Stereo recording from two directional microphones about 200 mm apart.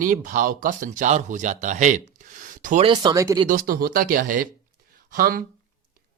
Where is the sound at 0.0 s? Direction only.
40° right (ahead or behind).